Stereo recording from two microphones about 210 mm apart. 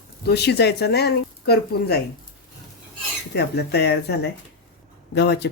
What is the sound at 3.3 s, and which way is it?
Speech, 50° left (ahead or behind).